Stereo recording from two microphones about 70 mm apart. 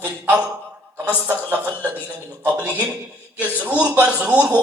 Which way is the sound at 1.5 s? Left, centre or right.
Right.